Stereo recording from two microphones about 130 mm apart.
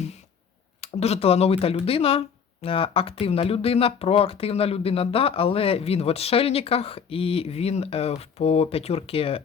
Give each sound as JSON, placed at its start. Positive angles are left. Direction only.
{"t": 0.8, "sound": "speech", "side_deg": 55}